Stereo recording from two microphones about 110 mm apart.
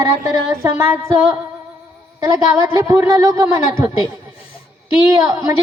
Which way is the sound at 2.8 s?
25° right (ahead or behind).